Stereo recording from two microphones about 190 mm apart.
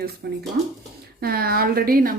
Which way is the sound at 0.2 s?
60° right (ahead or behind).